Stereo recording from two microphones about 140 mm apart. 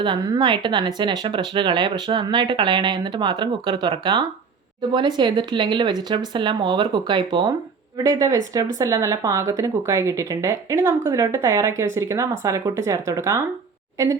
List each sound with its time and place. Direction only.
0.0 s speech: 35° right (ahead or behind)